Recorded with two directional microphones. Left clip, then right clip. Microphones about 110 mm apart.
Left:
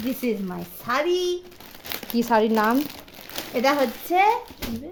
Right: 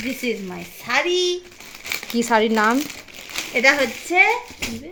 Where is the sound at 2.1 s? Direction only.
Centre (ahead or behind).